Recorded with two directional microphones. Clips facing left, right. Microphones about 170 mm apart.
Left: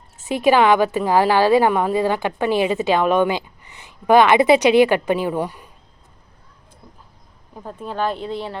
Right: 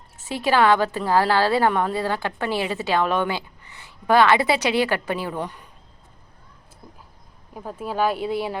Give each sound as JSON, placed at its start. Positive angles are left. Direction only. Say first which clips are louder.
{"t": 0.3, "sound": "a woman's voice", "louder": "left 4 dB", "side_deg": 15}
{"t": 7.5, "sound": "speech", "louder": "right 1 dB", "side_deg": -5}